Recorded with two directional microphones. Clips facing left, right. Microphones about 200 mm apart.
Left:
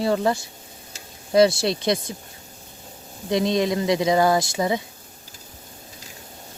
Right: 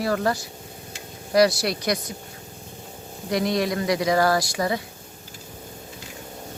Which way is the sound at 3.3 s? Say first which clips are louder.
Left 2 dB; 20° left (ahead or behind).